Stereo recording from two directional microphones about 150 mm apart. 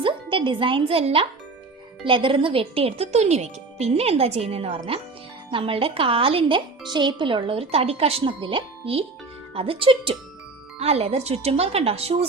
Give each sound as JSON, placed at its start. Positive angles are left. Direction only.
{"t": 0.0, "sound": "a woman's voice", "side_deg": -35}